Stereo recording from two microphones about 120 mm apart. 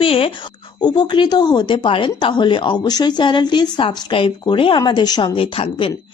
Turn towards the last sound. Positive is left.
turn(degrees=50)  # may be behind; listen again after turning